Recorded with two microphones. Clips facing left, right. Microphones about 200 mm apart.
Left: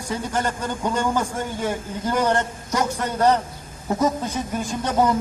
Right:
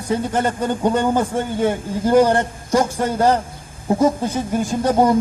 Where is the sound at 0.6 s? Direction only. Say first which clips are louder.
Right 6 dB; 30° right (ahead or behind).